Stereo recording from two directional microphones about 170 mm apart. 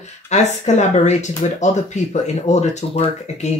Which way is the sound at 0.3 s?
40° left (ahead or behind).